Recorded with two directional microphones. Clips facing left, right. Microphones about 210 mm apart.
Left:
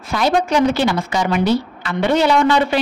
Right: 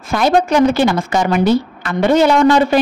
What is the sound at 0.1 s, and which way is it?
A woman's voice, 50° right (ahead or behind).